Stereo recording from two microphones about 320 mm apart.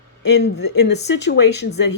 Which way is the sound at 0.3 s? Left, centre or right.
Left.